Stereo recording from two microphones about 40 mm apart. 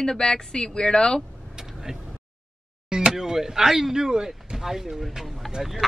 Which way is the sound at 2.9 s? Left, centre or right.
Centre.